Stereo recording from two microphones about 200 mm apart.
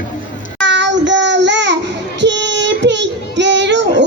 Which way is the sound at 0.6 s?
60° right (ahead or behind).